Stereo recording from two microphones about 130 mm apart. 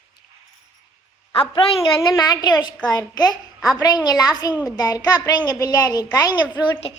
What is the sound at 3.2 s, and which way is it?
Speech, centre (ahead or behind).